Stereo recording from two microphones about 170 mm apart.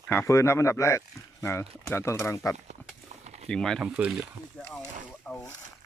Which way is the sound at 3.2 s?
40° right (ahead or behind).